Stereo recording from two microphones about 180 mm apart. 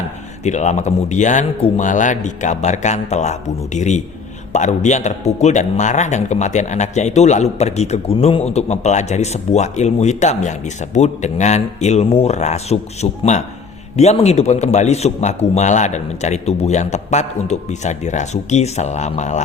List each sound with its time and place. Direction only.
0.4 s speech: 40° left (ahead or behind)